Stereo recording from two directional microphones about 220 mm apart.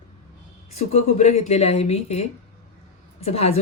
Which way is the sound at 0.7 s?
30° left (ahead or behind).